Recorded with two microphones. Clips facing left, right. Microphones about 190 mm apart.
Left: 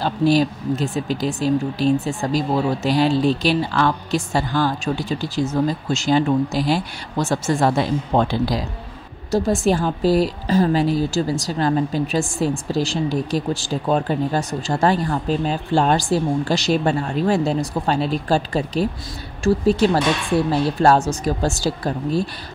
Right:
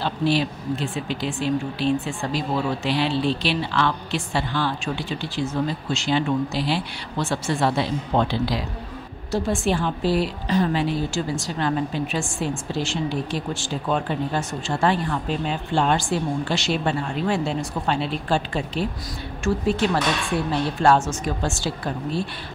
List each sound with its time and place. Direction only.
0.0 s a woman's voice: 40° left (ahead or behind)